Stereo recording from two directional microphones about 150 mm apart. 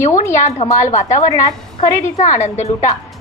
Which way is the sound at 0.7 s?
55° left (ahead or behind).